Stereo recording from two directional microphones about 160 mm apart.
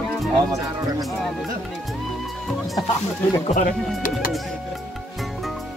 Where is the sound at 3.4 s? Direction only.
50° left (ahead or behind).